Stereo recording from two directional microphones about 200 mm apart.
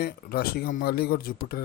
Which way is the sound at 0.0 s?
50° left (ahead or behind).